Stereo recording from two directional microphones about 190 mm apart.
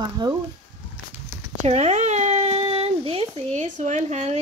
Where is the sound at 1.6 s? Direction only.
35° right (ahead or behind).